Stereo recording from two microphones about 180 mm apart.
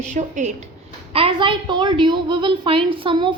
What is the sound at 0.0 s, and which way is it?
Speech, 40° right (ahead or behind).